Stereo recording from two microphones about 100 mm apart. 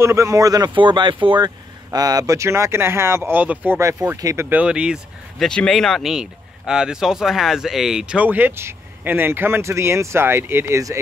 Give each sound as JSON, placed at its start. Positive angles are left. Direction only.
{"t": 0.0, "sound": "speech", "side_deg": -30}
{"t": 0.7, "sound": "speech", "side_deg": -55}
{"t": 3.8, "sound": "speech", "side_deg": -30}
{"t": 4.5, "sound": "speech", "side_deg": -10}
{"t": 5.4, "sound": "speech", "side_deg": 5}